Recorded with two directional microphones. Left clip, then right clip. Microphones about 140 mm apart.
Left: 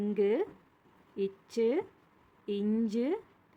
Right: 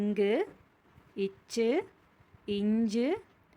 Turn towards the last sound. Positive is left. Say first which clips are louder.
# right 2 dB
turn(degrees=-20)  # may be behind; listen again after turning